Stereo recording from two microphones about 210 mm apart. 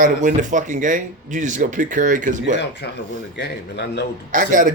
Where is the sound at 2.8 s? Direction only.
55° left (ahead or behind).